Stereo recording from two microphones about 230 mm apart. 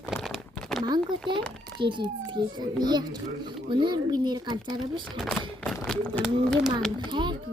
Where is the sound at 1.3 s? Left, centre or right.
Right.